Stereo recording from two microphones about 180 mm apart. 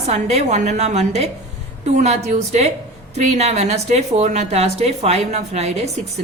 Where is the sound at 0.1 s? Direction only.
35° right (ahead or behind).